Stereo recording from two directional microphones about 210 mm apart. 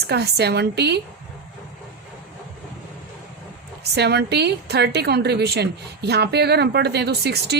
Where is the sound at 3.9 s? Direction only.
50° right (ahead or behind).